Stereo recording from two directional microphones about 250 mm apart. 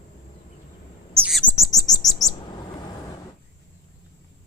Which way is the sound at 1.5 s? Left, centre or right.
Centre.